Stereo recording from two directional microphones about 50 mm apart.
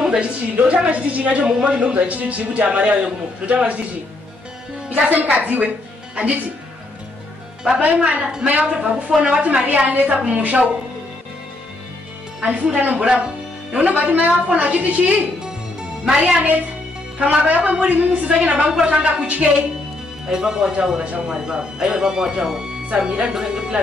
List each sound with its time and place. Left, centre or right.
0.2 s a man's voice: right
4.8 s a woman's voice: right
7.8 s a man's voice: right
9.7 s a woman's voice: right
12.4 s a woman's voice: right
13.0 s speech: centre
13.7 s a woman's voice: right
15.4 s music: centre
16.3 s a man's voice: right
20.2 s speech: centre